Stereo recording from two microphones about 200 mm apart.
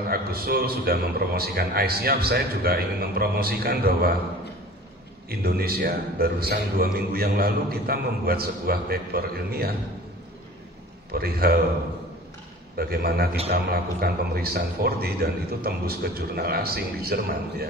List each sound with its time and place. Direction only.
0.1 s a man's voice: 50° right (ahead or behind)
5.3 s a man's voice: 50° right (ahead or behind)
11.1 s a man's voice: 50° right (ahead or behind)
12.7 s a man's voice: 50° right (ahead or behind)